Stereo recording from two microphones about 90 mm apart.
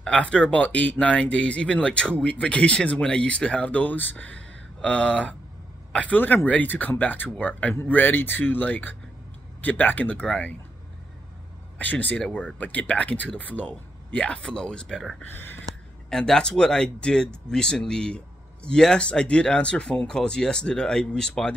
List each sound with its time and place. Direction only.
0.0 s speech: 10° left (ahead or behind)
11.8 s speech: 20° left (ahead or behind)
15.3 s a sound: 20° left (ahead or behind)
16.1 s speech: 10° left (ahead or behind)